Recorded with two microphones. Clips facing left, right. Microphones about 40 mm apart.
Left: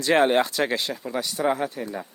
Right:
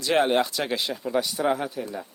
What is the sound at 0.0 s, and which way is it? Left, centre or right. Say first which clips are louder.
Speech: left 2 dB; centre.